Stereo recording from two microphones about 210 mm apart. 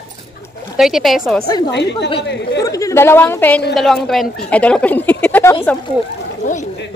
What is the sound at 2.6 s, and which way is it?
Speech, 15° left (ahead or behind).